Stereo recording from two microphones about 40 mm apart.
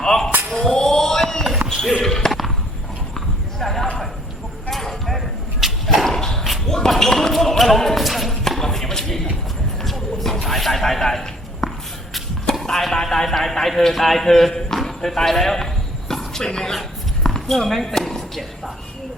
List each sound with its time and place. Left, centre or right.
0.0 s a sound: centre
1.6 s basketball bounce: centre
3.2 s clip-clop: centre
5.8 s a sound: centre
6.1 s dog: centre
6.7 s basketball bounce: centre
9.8 s music: centre
10.4 s a sound: centre
16.5 s speech: centre